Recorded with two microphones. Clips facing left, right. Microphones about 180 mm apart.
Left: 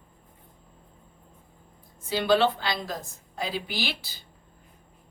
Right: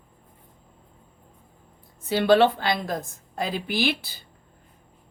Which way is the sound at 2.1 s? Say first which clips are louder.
Right 4 dB; 60° right (ahead or behind).